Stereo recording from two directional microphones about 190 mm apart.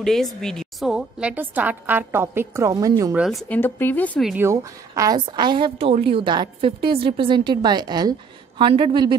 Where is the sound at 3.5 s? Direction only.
10° left (ahead or behind).